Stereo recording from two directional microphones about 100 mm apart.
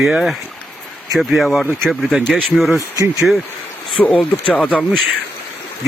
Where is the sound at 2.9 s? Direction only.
35° right (ahead or behind).